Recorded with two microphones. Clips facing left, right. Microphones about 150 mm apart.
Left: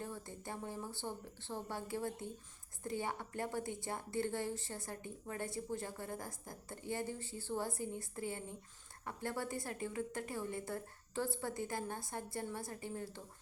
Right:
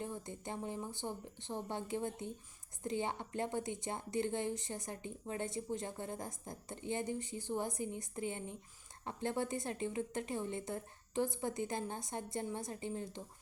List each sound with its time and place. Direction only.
0.0 s a woman's voice: 20° right (ahead or behind)